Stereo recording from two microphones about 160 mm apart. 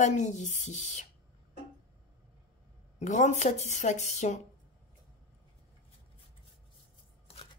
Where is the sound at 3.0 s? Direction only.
45° left (ahead or behind).